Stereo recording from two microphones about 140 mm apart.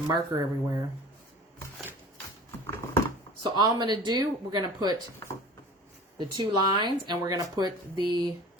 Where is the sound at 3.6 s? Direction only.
30° right (ahead or behind).